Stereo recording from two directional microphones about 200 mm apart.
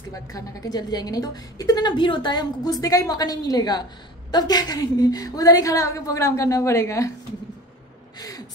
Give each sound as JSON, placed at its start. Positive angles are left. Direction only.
{"t": 0.1, "sound": "a woman's voice", "side_deg": 15}
{"t": 8.2, "sound": "gasp", "side_deg": 15}